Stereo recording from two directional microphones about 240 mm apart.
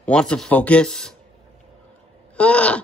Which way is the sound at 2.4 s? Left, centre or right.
Centre.